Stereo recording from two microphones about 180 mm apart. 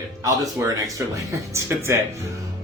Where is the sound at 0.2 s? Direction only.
20° right (ahead or behind).